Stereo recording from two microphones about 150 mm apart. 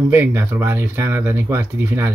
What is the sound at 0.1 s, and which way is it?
Speech, 15° right (ahead or behind).